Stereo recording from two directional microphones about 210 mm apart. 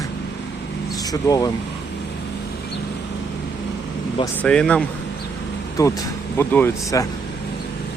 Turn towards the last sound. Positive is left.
turn(degrees=10)  # may be behind; listen again after turning